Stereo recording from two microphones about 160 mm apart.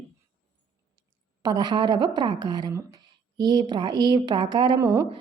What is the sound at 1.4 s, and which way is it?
A woman's voice, 25° right (ahead or behind).